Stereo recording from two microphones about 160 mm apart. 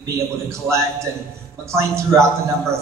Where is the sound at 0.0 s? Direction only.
20° right (ahead or behind).